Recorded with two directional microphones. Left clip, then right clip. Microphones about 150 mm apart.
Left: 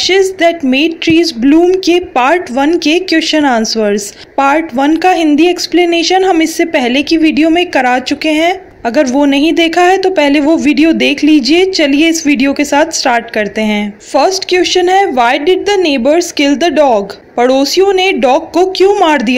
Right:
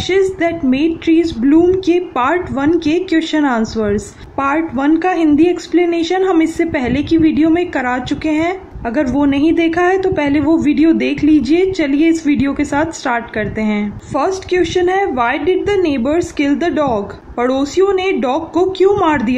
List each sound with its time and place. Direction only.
0.0 s speech: 30° left (ahead or behind)